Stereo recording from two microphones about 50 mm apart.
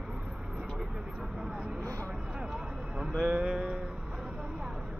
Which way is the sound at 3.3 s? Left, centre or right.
Centre.